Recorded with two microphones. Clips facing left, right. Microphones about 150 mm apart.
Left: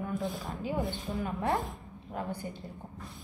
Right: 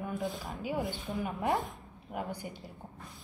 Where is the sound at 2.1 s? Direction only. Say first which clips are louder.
Left 1 dB; 15° right (ahead or behind).